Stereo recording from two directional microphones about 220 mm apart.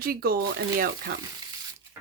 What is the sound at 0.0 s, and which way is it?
Speech, 40° right (ahead or behind).